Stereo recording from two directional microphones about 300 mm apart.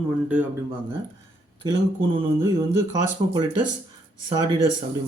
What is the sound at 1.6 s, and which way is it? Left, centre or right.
Speech, centre.